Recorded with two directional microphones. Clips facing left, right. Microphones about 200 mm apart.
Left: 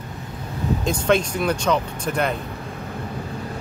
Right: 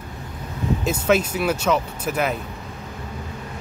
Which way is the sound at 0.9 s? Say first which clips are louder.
Even; 5° right (ahead or behind).